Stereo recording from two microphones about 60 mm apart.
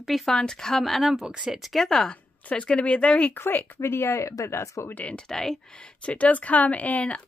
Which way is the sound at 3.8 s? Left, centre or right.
Left.